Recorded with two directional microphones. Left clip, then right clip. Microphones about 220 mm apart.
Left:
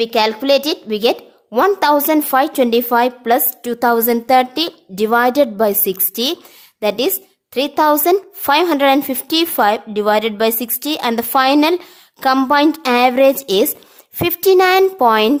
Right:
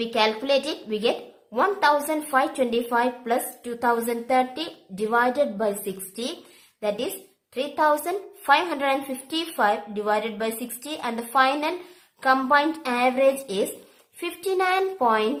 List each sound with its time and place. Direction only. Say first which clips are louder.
0.0 s a woman's voice: left 8 dB; 45° left (ahead or behind)